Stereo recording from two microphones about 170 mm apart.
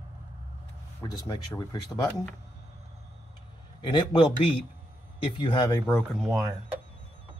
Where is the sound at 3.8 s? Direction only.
25° left (ahead or behind).